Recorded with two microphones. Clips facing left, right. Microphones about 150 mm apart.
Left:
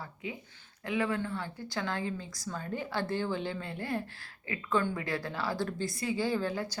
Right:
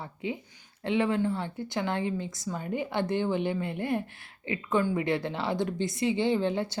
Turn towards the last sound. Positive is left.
turn(degrees=-25)  # may be behind; listen again after turning